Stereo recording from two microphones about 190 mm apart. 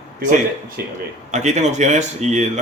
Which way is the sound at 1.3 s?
35° right (ahead or behind).